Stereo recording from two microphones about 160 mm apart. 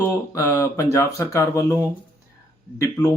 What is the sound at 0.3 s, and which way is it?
Speech, 20° left (ahead or behind).